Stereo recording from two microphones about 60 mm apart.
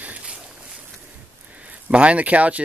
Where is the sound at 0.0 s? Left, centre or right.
Centre.